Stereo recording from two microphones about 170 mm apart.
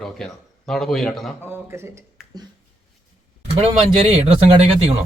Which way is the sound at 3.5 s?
35° right (ahead or behind).